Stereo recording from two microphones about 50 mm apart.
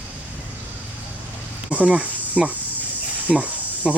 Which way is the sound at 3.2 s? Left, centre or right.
Right.